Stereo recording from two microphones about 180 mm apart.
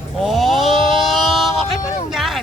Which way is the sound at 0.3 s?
Centre (ahead or behind).